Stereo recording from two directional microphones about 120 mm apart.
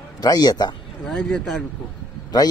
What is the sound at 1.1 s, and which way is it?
Speech, 5° left (ahead or behind).